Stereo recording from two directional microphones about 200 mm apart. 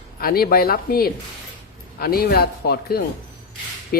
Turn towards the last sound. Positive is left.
turn(degrees=50)  # may be behind; listen again after turning